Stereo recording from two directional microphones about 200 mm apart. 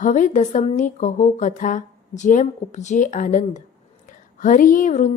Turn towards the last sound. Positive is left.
turn(degrees=40)  # may be behind; listen again after turning